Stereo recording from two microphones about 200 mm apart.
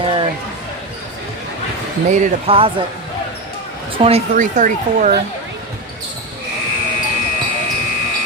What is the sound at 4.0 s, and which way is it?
Speech, 35° right (ahead or behind).